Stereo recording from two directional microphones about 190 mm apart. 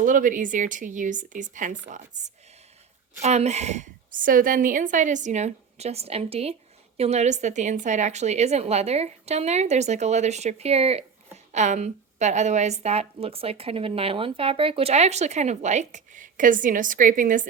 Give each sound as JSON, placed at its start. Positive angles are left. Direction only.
{"t": 0.0, "sound": "a woman's voice", "side_deg": -45}